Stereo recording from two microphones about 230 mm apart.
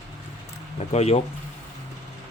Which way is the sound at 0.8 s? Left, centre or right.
Left.